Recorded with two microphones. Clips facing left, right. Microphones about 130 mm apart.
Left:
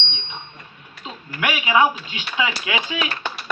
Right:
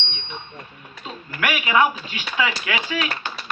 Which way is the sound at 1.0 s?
20° left (ahead or behind).